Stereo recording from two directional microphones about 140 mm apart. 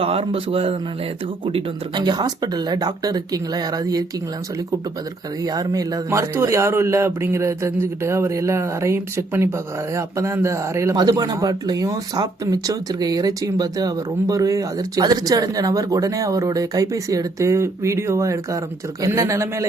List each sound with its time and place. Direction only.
0.0 s a man's voice: 40° right (ahead or behind); by 4.0 s 25° right (ahead or behind)
5.4 s speech: 25° right (ahead or behind)